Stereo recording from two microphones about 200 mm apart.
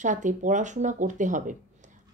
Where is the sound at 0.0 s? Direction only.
40° right (ahead or behind).